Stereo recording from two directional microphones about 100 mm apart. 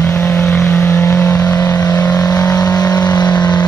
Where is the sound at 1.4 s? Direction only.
35° left (ahead or behind).